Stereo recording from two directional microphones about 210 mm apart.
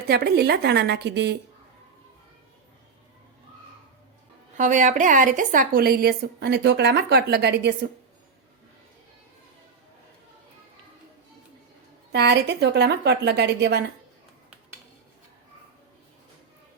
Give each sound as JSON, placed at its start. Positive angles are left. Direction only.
{"t": 0.1, "sound": "a woman's voice", "side_deg": -50}
{"t": 4.5, "sound": "a woman's voice", "side_deg": -35}
{"t": 12.1, "sound": "a woman's voice", "side_deg": -55}